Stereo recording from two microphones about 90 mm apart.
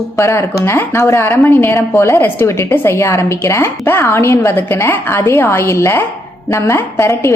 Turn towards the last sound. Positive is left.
turn(degrees=30)  # may be behind; listen again after turning